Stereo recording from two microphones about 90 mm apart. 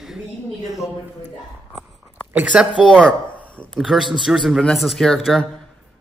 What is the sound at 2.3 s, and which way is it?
Speech, 15° right (ahead or behind).